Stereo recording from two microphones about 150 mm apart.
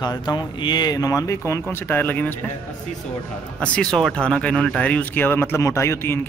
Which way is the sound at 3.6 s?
5° left (ahead or behind).